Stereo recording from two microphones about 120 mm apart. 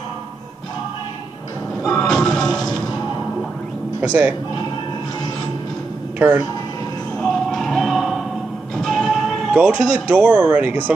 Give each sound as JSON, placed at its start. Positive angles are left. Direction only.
{"t": 1.8, "sound": "music", "side_deg": 5}
{"t": 4.0, "sound": "speech", "side_deg": -10}
{"t": 6.1, "sound": "speech", "side_deg": -10}
{"t": 7.2, "sound": "music", "side_deg": 0}
{"t": 10.1, "sound": "speech", "side_deg": -10}